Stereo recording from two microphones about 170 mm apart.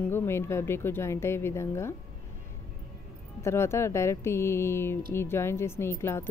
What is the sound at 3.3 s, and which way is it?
A woman's voice, 15° left (ahead or behind).